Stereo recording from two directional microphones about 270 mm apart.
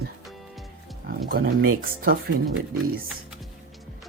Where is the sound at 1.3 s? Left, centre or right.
Right.